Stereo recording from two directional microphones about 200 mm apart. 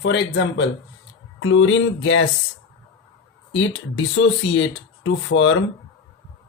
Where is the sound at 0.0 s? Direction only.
60° left (ahead or behind).